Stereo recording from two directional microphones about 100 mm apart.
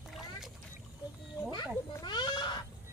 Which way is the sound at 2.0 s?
50° left (ahead or behind).